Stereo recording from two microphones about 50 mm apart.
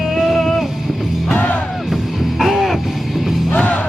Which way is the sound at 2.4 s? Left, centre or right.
Centre.